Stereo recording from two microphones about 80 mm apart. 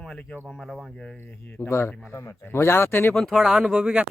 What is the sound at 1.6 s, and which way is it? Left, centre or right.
Speech, left.